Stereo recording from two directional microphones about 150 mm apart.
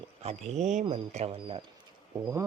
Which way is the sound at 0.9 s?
40° right (ahead or behind).